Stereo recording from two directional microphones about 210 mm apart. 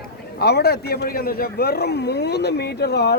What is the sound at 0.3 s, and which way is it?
A man's voice, 50° left (ahead or behind).